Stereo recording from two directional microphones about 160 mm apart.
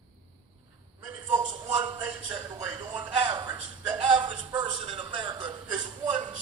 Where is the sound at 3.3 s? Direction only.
30° right (ahead or behind).